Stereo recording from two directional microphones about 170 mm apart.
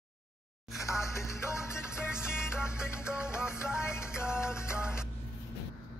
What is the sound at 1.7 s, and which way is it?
Music, 5° right (ahead or behind).